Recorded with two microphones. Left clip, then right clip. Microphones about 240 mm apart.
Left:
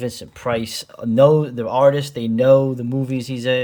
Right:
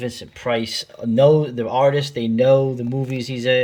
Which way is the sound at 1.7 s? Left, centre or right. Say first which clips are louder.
Left 2 dB; left.